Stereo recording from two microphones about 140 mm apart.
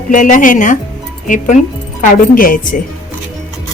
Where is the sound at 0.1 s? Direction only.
65° left (ahead or behind); by 2.6 s 90° left.